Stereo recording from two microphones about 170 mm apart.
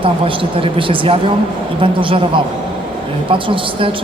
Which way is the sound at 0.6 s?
30° right (ahead or behind).